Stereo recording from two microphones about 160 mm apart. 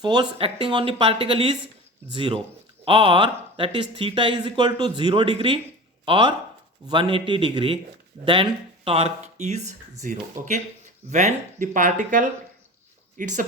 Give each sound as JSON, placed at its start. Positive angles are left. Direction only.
{"t": 0.0, "sound": "speech", "side_deg": -30}